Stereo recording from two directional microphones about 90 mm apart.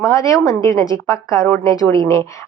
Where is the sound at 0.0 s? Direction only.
35° left (ahead or behind).